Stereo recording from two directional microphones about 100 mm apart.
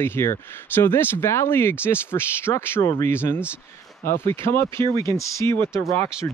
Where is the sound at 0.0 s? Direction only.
25° left (ahead or behind).